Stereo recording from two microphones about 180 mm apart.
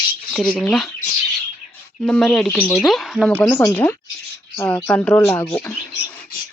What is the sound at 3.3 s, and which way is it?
Speech, 15° left (ahead or behind).